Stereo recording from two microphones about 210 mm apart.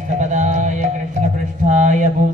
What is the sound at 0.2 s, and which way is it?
Music, 35° right (ahead or behind).